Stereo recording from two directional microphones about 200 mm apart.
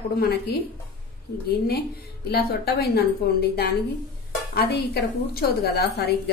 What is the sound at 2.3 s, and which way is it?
Speech, 50° left (ahead or behind).